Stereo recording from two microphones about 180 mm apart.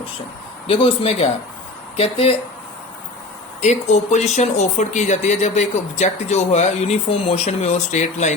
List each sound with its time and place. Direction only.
0.7 s speech: 30° left (ahead or behind)
3.6 s speech: 40° left (ahead or behind)